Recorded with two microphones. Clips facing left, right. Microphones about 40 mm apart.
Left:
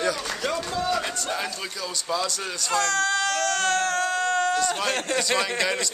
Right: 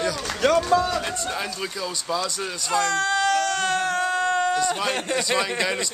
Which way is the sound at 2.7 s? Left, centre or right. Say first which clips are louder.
Right 1 dB; centre.